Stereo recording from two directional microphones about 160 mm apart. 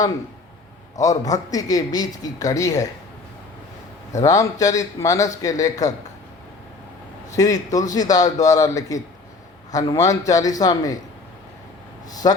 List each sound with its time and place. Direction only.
1.2 s speech: 20° left (ahead or behind)
4.1 s speech: 20° left (ahead or behind)
7.3 s speech: 20° left (ahead or behind)
12.2 s speech: 25° left (ahead or behind)